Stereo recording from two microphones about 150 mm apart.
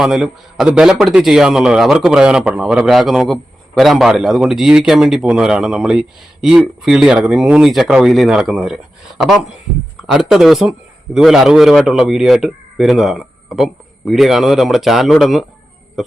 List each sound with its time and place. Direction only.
0.0 s a man's voice: 5° right (ahead or behind)
10.1 s a man's voice: 5° right (ahead or behind)